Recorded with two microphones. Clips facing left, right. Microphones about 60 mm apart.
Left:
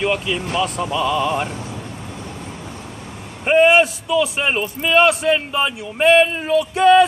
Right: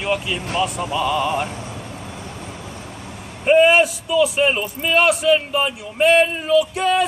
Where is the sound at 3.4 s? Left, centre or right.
Left.